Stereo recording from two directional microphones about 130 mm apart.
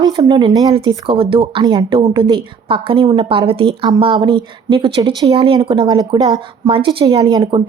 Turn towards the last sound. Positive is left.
turn(degrees=-35)  # may be behind; listen again after turning